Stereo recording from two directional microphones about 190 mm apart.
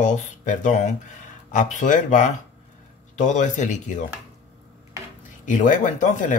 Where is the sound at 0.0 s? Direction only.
40° left (ahead or behind).